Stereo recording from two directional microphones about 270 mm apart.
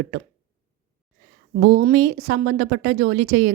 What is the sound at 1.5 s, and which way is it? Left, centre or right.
A woman's voice, right.